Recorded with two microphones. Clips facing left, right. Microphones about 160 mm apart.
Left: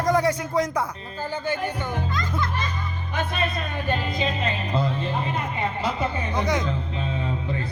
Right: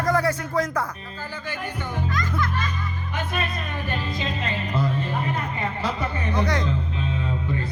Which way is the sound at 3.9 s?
25° left (ahead or behind).